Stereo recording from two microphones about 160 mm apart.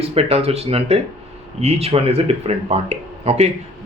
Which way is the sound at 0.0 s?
40° right (ahead or behind).